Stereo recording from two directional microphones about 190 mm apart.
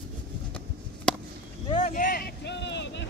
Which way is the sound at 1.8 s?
45° left (ahead or behind).